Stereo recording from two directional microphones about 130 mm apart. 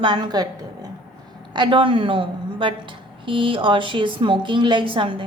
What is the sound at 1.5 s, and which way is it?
A woman's voice, 35° right (ahead or behind).